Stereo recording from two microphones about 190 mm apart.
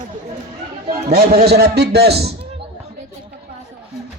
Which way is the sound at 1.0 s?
50° right (ahead or behind).